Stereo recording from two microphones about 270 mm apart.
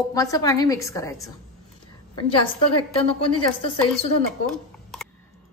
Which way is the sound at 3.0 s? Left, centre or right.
Centre.